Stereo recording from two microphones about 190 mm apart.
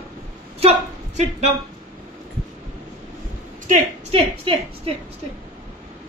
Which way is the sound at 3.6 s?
35° right (ahead or behind).